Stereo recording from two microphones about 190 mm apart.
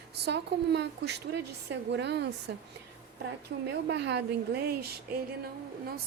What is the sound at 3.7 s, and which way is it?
Speech, 65° right (ahead or behind).